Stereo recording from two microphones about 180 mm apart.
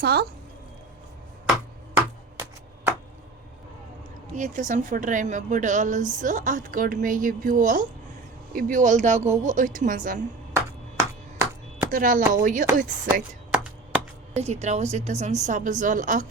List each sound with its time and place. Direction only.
0.0 s speech: 60° right (ahead or behind)
2.0 s a sound: 15° right (ahead or behind)
4.4 s a woman's voice: 45° right (ahead or behind)
10.5 s chop: 15° right (ahead or behind)
11.9 s a woman's voice: 50° right (ahead or behind)
13.5 s a sound: 5° right (ahead or behind)
14.3 s a woman's voice: 35° right (ahead or behind)